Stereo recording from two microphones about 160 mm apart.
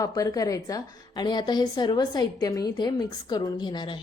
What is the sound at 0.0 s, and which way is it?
A woman's voice, 20° left (ahead or behind).